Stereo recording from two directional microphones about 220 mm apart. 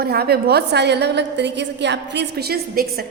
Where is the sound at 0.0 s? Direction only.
45° right (ahead or behind).